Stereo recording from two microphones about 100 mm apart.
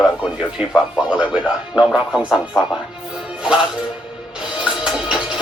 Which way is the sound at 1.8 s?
5° right (ahead or behind).